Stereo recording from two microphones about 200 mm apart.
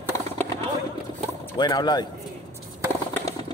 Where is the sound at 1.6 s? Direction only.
20° left (ahead or behind).